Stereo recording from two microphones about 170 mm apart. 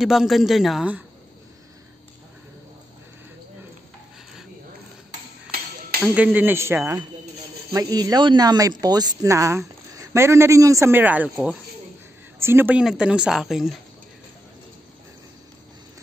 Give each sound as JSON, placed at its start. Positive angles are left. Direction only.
{"t": 0.0, "sound": "a woman's voice", "side_deg": 0}
{"t": 6.1, "sound": "a woman's voice", "side_deg": -10}